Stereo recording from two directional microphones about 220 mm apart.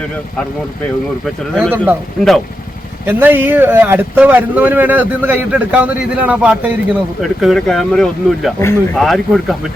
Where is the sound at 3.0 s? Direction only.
10° right (ahead or behind).